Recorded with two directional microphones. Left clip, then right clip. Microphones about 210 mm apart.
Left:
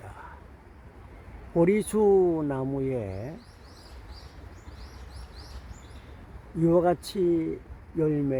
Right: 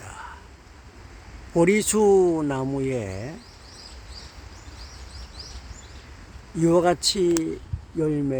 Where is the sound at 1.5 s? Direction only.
10° right (ahead or behind).